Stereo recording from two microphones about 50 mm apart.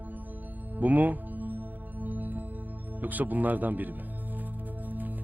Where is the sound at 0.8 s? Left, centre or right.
Right.